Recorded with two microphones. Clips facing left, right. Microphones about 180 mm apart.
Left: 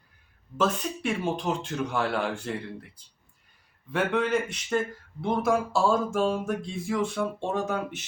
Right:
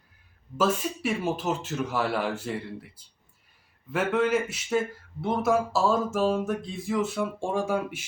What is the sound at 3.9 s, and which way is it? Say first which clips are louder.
Speech: right 1 dB; 5° right (ahead or behind).